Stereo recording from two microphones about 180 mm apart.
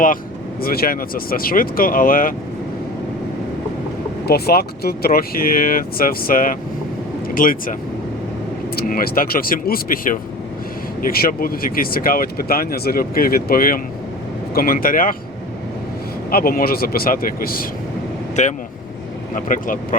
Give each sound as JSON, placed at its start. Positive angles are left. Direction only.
{"t": 0.6, "sound": "speech", "side_deg": 55}
{"t": 4.3, "sound": "speech", "side_deg": 60}
{"t": 16.3, "sound": "speech", "side_deg": 55}
{"t": 18.4, "sound": "speech", "side_deg": 40}